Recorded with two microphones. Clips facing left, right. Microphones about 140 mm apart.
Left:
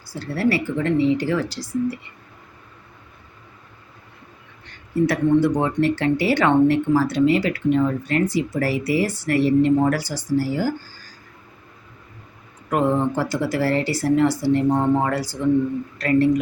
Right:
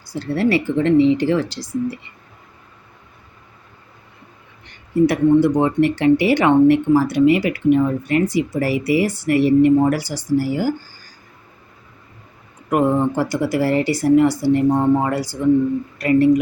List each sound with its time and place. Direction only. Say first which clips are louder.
0.1 s speech: right 3 dB; 20° right (ahead or behind)
4.6 s speech: right 4 dB; 15° right (ahead or behind)
12.7 s speech: right 3 dB; 15° right (ahead or behind)